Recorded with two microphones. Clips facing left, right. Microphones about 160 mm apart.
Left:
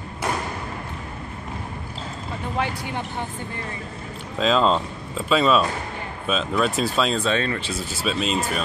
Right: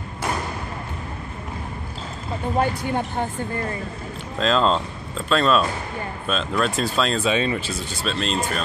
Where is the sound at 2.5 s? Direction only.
45° right (ahead or behind).